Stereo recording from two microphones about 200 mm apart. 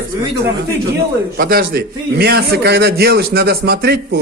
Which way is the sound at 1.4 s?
50° right (ahead or behind).